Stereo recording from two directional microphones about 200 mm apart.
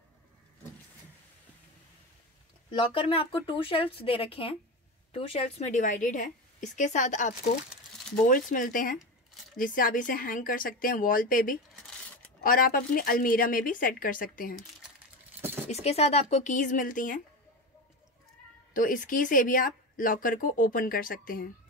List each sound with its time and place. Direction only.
2.7 s a woman's voice: 25° left (ahead or behind); by 14.5 s 45° left (ahead or behind)
15.7 s a woman's voice: 30° left (ahead or behind)
18.7 s speech: 40° left (ahead or behind)